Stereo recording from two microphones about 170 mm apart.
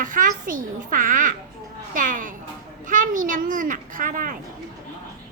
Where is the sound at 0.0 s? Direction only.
55° right (ahead or behind).